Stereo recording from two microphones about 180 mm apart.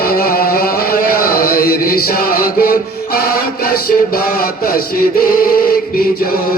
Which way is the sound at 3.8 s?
55° left (ahead or behind).